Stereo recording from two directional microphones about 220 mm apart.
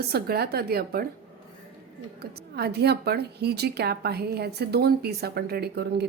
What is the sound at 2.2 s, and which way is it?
A woman's voice, 45° right (ahead or behind).